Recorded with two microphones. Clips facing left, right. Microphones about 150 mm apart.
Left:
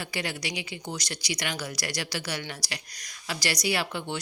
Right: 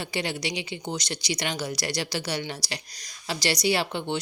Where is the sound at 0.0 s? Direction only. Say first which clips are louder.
Right 3 dB; 25° right (ahead or behind).